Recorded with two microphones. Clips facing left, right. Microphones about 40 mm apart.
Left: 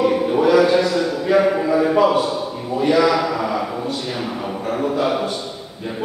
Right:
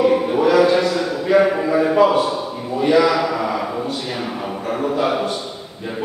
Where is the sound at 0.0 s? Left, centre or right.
Centre.